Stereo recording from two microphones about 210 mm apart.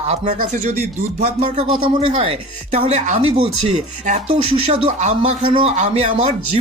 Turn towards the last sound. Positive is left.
turn(degrees=-30)  # may be behind; listen again after turning